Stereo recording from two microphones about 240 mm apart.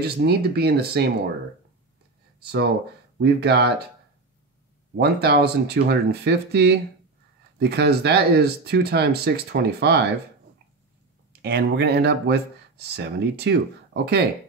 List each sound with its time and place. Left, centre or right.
0.0 s speech: right
3.2 s speech: right
4.9 s speech: right
11.4 s speech: right